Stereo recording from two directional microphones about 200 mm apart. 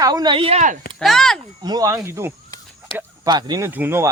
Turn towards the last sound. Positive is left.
turn(degrees=-10)  # may be behind; listen again after turning